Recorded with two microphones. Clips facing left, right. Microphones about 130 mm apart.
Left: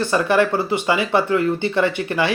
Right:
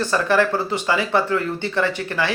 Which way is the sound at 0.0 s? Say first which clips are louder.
Left 1 dB; 15° left (ahead or behind).